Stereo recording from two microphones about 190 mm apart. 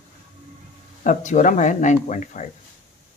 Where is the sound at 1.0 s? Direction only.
40° left (ahead or behind).